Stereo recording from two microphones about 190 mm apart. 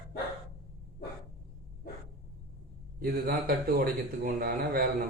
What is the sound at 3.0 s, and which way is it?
A man's voice, 50° right (ahead or behind).